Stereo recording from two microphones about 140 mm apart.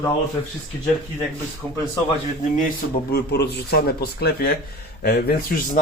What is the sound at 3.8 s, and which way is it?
Speech, 90° left.